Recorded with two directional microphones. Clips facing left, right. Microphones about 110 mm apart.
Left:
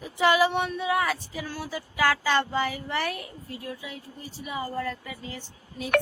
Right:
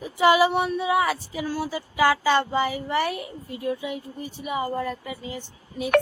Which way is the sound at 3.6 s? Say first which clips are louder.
Right 12 dB; 20° right (ahead or behind).